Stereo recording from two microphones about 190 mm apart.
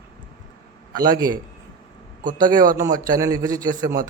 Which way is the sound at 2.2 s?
45° right (ahead or behind).